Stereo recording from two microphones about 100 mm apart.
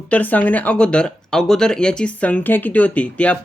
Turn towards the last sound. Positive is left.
turn(degrees=15)  # may be behind; listen again after turning